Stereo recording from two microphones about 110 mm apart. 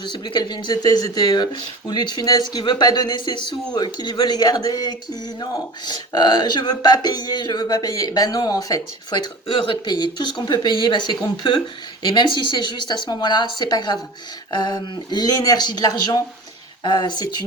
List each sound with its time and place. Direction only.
0.0 s speech: 45° left (ahead or behind)